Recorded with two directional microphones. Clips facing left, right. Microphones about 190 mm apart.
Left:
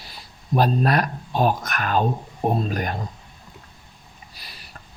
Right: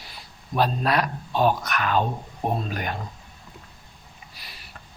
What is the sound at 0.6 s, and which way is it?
Speech, 45° left (ahead or behind).